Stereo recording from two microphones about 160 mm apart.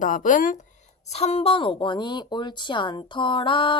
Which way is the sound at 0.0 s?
55° left (ahead or behind).